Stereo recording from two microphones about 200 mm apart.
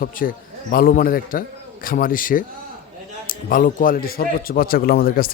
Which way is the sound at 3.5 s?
40° left (ahead or behind).